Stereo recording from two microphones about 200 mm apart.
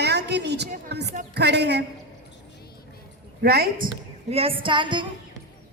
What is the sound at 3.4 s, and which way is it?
Speech, 50° right (ahead or behind).